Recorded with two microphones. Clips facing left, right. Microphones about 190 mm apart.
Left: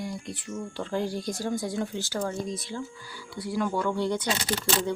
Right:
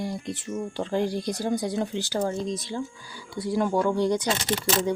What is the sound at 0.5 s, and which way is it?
A woman's voice, 20° right (ahead or behind).